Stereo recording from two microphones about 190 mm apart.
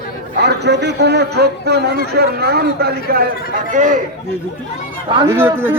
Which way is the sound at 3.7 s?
40° right (ahead or behind).